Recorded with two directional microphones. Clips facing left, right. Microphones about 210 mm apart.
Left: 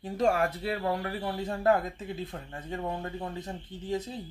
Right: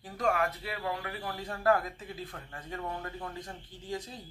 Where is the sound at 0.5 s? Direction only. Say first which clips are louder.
Left 6 dB; 35° left (ahead or behind).